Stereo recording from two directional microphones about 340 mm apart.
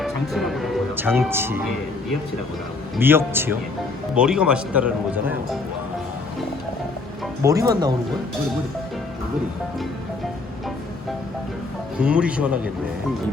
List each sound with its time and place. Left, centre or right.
0.0 s speech: centre
2.9 s a man's voice: centre
7.4 s a man's voice: centre
11.9 s speech: centre